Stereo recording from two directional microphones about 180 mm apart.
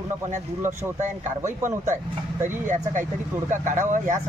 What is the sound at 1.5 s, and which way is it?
Speech, 45° right (ahead or behind).